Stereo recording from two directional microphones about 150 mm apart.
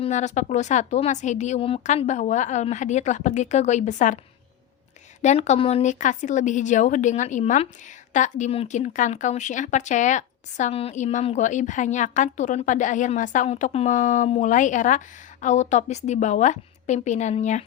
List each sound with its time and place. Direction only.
0.0 s speech: 50° left (ahead or behind)
1.8 s speech: 50° left (ahead or behind)
5.2 s speech: 50° left (ahead or behind)